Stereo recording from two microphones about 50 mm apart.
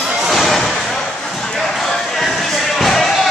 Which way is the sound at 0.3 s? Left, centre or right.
Centre.